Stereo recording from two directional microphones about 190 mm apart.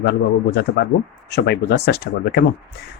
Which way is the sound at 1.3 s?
60° left (ahead or behind).